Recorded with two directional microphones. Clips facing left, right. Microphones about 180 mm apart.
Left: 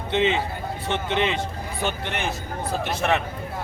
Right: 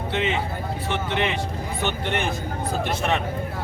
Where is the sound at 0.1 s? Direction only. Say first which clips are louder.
Left 4 dB; 25° left (ahead or behind).